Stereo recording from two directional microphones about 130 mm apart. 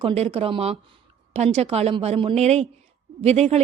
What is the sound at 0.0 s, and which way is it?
A woman's voice, 50° right (ahead or behind).